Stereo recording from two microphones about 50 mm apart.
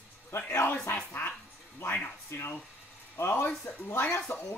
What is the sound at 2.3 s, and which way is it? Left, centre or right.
Speech, left.